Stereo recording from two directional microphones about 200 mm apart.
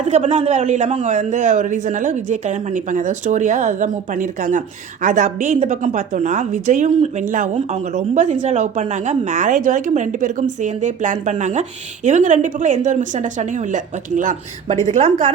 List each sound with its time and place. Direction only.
0.0 s a woman's voice: 35° right (ahead or behind)